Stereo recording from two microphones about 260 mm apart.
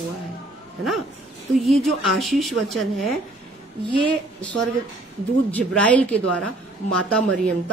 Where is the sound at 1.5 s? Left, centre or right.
Centre.